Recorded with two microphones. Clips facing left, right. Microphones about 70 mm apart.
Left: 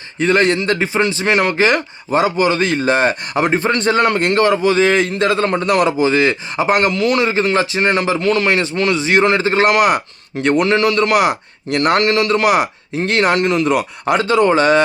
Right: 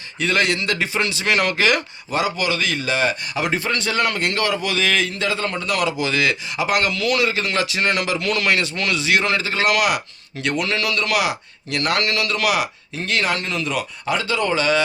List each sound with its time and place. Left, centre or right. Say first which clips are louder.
0.2 s speech: left 6 dB; left
6.0 s speech: left 7 dB; left